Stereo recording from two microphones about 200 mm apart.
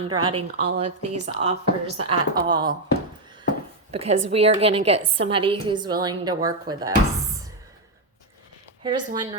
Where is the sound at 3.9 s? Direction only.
30° right (ahead or behind).